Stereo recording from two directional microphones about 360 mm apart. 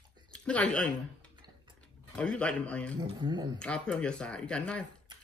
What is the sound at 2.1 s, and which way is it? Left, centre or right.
Speech, centre.